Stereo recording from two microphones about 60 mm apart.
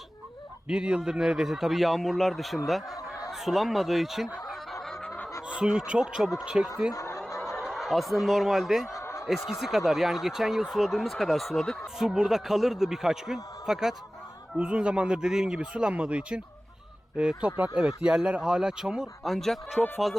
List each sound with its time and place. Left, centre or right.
0.7 s speech: centre
4.4 s fowl: centre
5.0 s fowl: left
5.5 s speech: centre
6.9 s snicker: left
7.6 s speech: centre
8.9 s a sound: left
9.2 s speech: centre
11.9 s speech: centre
14.5 s speech: centre
19.2 s speech: centre